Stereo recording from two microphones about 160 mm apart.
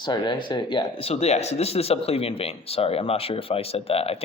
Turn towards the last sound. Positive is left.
turn(degrees=40)  # may be behind; listen again after turning